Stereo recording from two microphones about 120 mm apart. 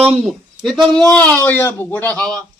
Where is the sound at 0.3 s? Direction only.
Centre (ahead or behind).